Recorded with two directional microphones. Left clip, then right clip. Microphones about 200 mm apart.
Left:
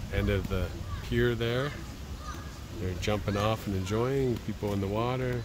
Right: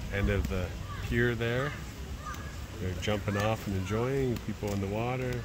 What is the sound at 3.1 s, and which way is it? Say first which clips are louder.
Speech: left 1 dB; 20° left (ahead or behind).